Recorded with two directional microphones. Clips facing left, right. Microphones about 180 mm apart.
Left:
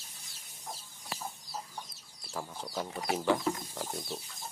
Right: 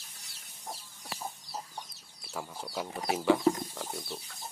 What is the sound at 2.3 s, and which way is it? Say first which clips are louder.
Speech: even; 5° right (ahead or behind).